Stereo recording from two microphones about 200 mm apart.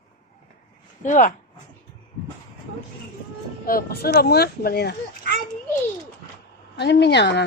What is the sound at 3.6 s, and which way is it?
Speech, 50° left (ahead or behind).